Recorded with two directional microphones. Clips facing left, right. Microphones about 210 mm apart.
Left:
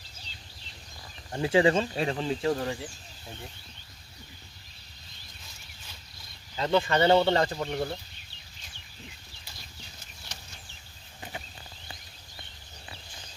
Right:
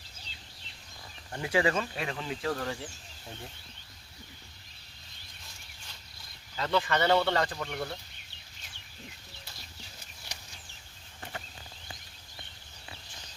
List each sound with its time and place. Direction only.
1.3 s speech: 25° left (ahead or behind)
6.6 s speech: 25° left (ahead or behind)
11.2 s a sound: 15° left (ahead or behind)